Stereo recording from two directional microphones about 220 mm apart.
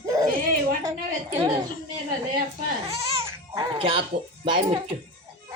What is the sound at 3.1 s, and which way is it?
Baby cry, 15° right (ahead or behind).